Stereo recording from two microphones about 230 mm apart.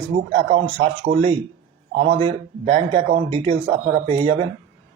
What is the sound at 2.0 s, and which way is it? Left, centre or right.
Speech, right.